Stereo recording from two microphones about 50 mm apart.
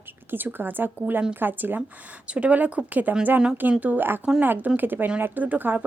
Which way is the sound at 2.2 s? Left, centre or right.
Right.